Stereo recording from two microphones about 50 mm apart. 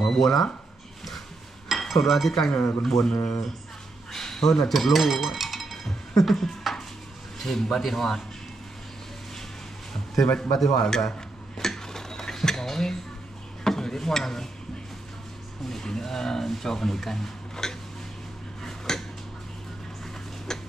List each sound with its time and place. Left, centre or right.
0.0 s speech: centre
1.8 s speech: centre
2.3 s speech: centre
4.1 s a sound: centre
4.7 s a man's voice: centre
10.2 s a man's voice: left
10.5 s dishes: centre
13.7 s a sound: centre
15.7 s speech: centre
18.6 s a sound: centre
20.5 s tick-tock: centre